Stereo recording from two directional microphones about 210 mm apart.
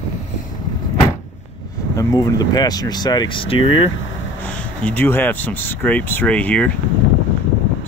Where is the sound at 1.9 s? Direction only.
15° left (ahead or behind).